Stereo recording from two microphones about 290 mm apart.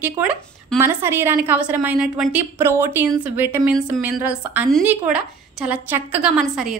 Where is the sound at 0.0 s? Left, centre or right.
Centre.